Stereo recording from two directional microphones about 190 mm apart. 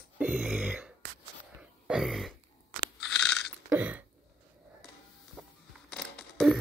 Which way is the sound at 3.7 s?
10° right (ahead or behind).